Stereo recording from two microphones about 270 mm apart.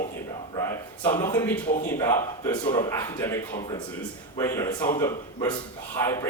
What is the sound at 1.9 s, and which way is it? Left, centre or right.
A man's voice, centre.